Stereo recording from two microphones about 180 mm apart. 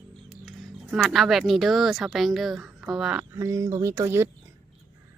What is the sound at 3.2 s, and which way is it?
Speech, 15° right (ahead or behind).